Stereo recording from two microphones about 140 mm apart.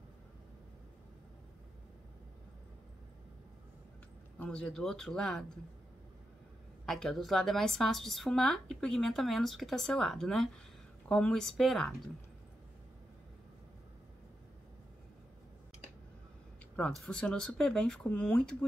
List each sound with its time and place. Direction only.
4.4 s a woman's voice: 5° left (ahead or behind)
6.9 s a woman's voice: 5° left (ahead or behind)
16.7 s speech: 5° left (ahead or behind)